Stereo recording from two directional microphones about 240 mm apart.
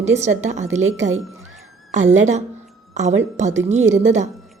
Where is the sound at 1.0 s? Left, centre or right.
Right.